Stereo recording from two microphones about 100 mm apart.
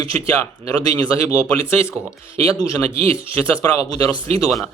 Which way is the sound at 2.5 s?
40° left (ahead or behind).